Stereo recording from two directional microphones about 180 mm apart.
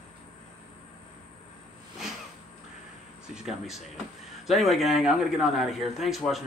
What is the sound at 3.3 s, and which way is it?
Speech, centre (ahead or behind).